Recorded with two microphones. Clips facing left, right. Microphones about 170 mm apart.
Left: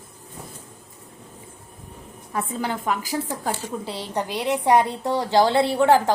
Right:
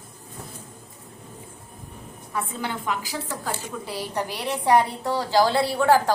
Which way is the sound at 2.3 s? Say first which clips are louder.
Left 3 dB; 40° left (ahead or behind).